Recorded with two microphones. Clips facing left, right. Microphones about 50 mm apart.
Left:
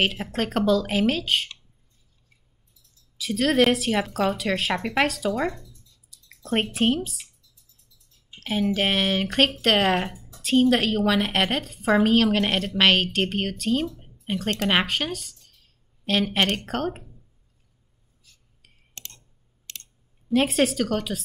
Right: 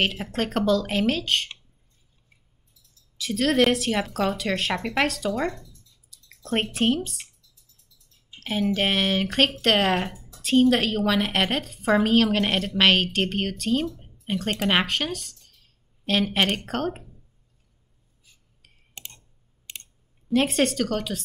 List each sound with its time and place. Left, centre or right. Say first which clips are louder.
0.0 s speech: left 1 dB; centre
2.8 s speech: even; centre
8.4 s a woman's voice: even; centre
19.0 s clicking: right 1 dB; centre
19.6 s a sound: right 1 dB; centre
20.2 s speech: left 1 dB; centre